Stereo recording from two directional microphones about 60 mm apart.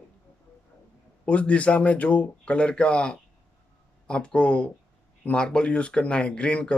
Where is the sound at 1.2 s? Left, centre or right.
Left.